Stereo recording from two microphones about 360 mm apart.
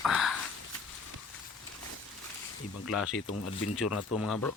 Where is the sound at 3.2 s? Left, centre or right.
Left.